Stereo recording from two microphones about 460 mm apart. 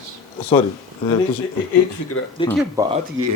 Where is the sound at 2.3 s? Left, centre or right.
Centre.